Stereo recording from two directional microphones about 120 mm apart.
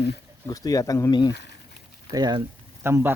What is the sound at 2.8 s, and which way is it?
Speech, 20° right (ahead or behind).